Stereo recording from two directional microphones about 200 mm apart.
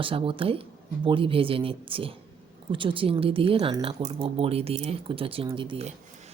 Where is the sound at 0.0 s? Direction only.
25° right (ahead or behind).